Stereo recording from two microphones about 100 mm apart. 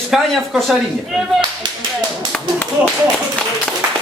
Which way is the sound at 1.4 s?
50° right (ahead or behind).